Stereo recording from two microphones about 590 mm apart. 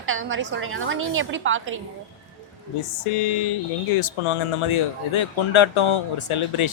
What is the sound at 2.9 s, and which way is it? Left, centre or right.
Speech, left.